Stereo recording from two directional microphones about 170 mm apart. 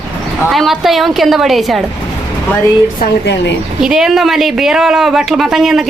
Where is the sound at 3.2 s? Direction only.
90° left.